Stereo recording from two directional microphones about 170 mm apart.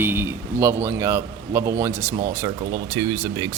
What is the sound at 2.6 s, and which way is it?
Speech, 60° right (ahead or behind).